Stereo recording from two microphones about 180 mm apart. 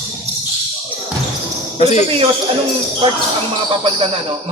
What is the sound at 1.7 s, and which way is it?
Speech, 40° left (ahead or behind).